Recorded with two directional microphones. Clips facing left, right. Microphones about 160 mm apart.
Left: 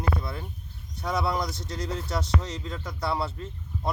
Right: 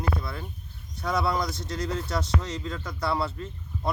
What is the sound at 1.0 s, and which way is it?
Speech, 15° left (ahead or behind).